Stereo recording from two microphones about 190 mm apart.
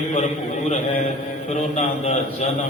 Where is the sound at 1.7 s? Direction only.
35° left (ahead or behind).